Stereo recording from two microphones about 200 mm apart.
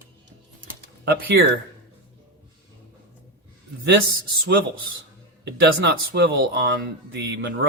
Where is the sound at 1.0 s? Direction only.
55° right (ahead or behind).